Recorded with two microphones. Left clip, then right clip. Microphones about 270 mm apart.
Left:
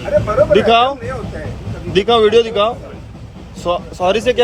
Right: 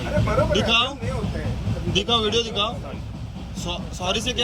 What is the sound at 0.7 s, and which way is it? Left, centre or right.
Speech, right.